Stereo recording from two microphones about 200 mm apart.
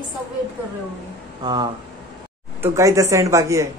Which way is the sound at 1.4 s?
20° right (ahead or behind).